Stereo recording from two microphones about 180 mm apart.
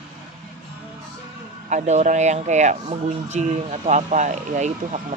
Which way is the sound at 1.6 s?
40° right (ahead or behind).